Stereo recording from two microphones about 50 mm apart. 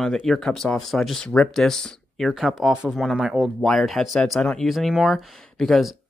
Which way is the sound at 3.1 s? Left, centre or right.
Right.